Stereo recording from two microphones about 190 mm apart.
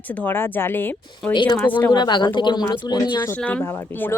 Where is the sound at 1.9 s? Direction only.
25° left (ahead or behind).